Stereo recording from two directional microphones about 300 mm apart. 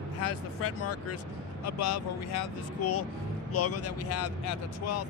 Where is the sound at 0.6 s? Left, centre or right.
Left.